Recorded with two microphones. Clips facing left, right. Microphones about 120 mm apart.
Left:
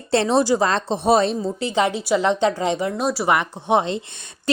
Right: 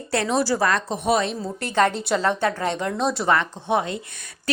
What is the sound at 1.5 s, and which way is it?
Speech, 15° left (ahead or behind).